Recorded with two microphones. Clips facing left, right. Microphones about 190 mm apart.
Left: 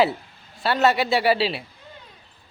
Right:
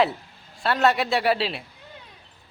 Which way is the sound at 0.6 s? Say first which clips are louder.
Left 1 dB; centre (ahead or behind).